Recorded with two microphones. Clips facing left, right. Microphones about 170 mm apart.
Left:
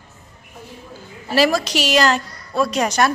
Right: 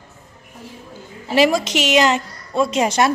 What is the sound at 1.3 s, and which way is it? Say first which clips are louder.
A woman's voice: right 1 dB; 20° right (ahead or behind).